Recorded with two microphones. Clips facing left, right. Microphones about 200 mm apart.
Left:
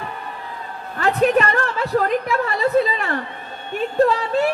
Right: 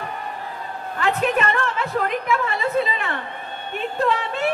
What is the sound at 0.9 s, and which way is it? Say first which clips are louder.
A woman's voice: left 5 dB; 40° left (ahead or behind).